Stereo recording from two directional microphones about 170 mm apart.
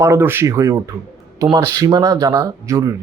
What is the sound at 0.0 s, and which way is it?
Speech, 15° right (ahead or behind).